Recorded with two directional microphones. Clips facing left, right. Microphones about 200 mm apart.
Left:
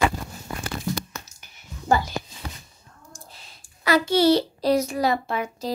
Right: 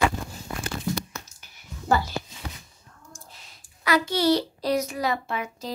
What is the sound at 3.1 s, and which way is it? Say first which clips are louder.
A child's voice: left 2 dB; 30° left (ahead or behind).